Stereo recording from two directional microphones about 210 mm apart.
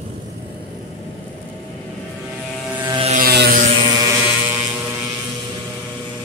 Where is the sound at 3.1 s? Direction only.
45° right (ahead or behind).